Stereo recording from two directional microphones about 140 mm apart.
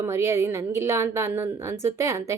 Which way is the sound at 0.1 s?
20° right (ahead or behind).